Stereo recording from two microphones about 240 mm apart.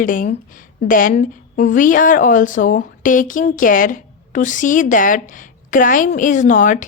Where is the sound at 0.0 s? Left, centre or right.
Left.